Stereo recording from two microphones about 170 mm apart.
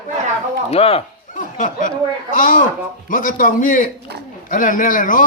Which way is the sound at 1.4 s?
50° left (ahead or behind).